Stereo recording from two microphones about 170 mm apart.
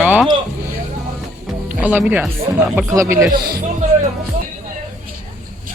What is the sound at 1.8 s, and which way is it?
Speech, 10° right (ahead or behind).